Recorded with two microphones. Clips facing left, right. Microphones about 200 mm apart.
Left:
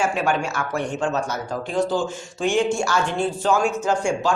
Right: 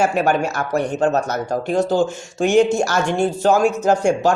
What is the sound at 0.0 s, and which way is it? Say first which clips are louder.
Speech: right 5 dB; 40° right (ahead or behind).